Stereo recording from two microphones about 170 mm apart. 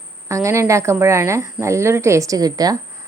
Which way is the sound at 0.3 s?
15° right (ahead or behind).